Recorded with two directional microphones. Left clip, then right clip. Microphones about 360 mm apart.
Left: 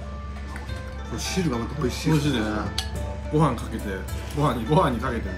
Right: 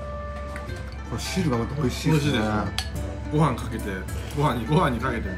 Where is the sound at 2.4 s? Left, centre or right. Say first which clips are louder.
Right 1 dB; right.